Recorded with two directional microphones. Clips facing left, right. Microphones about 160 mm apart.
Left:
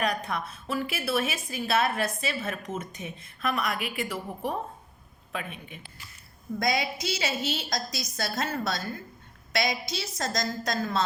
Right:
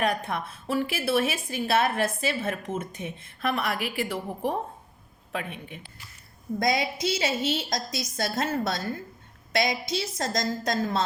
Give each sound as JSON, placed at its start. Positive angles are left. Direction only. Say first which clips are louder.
{"t": 0.0, "sound": "a woman's voice", "louder": "right 2 dB", "side_deg": -25}
{"t": 6.6, "sound": "a woman's voice", "louder": "right 2 dB", "side_deg": -25}